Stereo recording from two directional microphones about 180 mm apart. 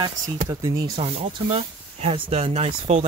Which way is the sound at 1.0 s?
30° right (ahead or behind).